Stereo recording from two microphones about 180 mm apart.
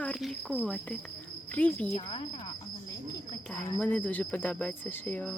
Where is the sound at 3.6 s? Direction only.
10° left (ahead or behind).